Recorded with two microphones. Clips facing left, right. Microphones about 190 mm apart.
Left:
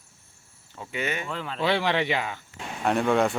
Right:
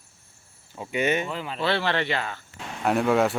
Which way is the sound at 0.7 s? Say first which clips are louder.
Right 6 dB; 20° right (ahead or behind).